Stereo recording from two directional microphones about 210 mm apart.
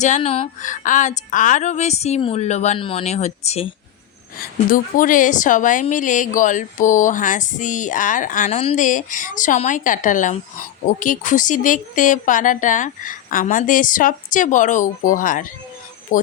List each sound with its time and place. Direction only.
0.0 s a woman's voice: 30° left (ahead or behind)